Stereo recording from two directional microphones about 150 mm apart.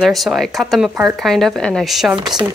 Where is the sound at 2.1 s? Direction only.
30° right (ahead or behind).